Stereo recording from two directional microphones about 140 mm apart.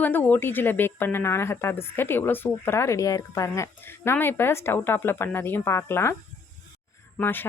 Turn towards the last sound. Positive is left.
turn(degrees=15)  # may be behind; listen again after turning